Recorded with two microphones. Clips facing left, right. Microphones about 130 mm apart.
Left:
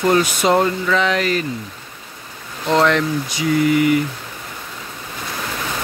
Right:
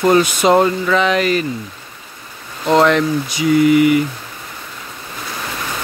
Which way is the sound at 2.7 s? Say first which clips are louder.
Right 3 dB; 20° right (ahead or behind).